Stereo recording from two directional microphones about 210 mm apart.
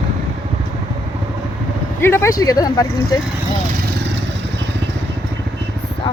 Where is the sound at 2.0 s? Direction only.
10° left (ahead or behind).